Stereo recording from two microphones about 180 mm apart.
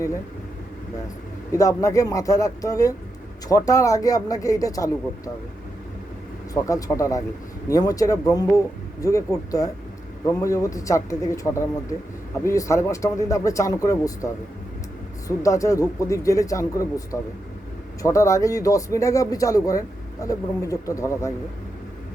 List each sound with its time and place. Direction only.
1.5 s speech: 20° left (ahead or behind)
6.5 s speech: 20° left (ahead or behind)
15.4 s speech: 15° left (ahead or behind)